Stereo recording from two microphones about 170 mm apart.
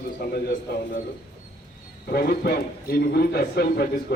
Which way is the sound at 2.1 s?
65° left (ahead or behind).